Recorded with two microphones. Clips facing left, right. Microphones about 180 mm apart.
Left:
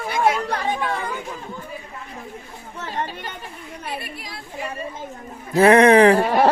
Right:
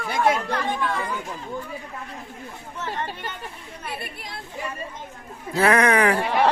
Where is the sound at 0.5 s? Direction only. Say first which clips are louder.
Left 1 dB; 45° left (ahead or behind).